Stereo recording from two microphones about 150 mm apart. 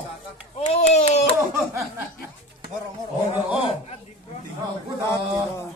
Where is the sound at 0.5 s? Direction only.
50° left (ahead or behind).